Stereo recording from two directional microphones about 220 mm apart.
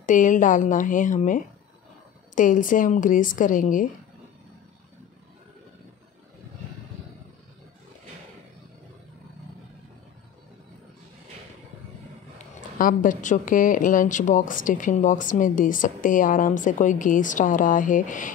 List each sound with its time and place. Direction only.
0.0 s a woman's voice: 35° left (ahead or behind)
12.4 s a woman's voice: 40° left (ahead or behind)